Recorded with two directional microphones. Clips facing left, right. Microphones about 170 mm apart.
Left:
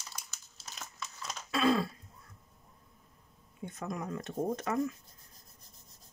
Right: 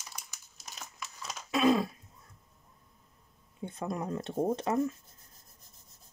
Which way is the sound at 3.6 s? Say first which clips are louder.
Right 3 dB; 30° right (ahead or behind).